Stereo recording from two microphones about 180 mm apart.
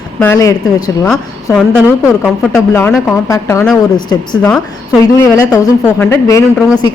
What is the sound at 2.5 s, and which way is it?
A woman's voice, 10° left (ahead or behind).